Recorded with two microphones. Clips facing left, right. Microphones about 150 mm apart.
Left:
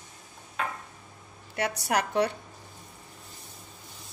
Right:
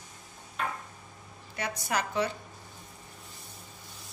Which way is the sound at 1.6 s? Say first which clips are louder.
Left 4 dB; 70° left (ahead or behind).